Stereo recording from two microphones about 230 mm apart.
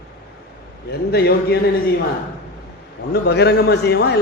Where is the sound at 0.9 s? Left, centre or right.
Left.